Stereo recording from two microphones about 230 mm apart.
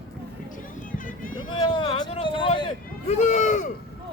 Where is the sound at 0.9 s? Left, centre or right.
Left.